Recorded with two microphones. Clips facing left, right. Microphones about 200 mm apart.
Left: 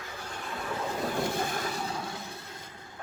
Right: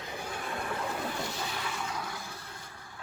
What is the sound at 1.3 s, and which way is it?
Vehicle, 50° left (ahead or behind).